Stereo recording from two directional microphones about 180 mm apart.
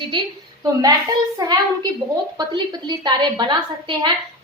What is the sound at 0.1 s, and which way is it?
A woman's voice, 25° right (ahead or behind).